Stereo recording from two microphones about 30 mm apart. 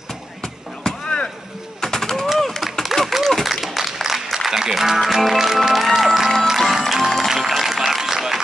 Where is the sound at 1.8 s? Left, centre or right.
Centre.